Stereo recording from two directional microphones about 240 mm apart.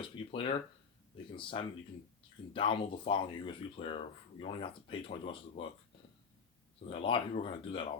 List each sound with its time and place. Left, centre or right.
0.3 s speech: left
6.8 s speech: left